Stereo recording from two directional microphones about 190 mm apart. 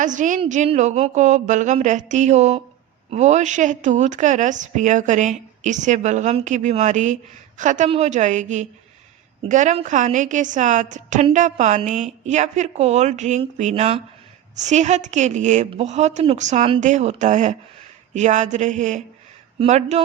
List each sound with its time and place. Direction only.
0.0 s a woman's voice: 40° right (ahead or behind)